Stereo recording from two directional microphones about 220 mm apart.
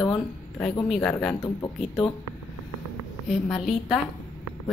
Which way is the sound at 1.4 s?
20° left (ahead or behind).